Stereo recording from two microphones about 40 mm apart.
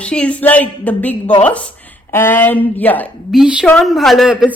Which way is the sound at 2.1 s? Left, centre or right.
Left.